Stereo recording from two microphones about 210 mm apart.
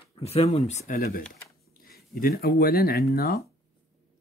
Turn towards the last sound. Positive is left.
turn(degrees=45)  # may be behind; listen again after turning